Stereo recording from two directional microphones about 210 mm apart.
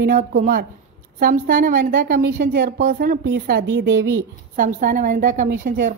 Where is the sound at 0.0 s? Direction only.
45° right (ahead or behind).